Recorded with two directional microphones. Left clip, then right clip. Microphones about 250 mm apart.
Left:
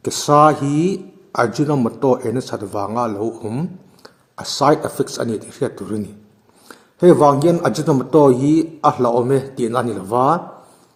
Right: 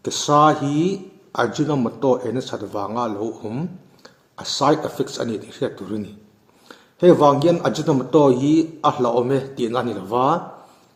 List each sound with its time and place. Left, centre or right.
0.0 s a man's voice: left
0.6 s speech: left
0.9 s a man's voice: left